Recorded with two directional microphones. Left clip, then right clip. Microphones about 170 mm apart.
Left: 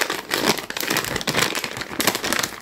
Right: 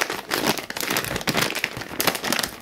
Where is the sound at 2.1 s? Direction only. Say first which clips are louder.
Left 1 dB; 25° right (ahead or behind).